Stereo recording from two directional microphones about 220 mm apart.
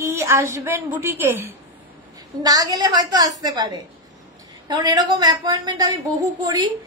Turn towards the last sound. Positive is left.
turn(degrees=-15)  # may be behind; listen again after turning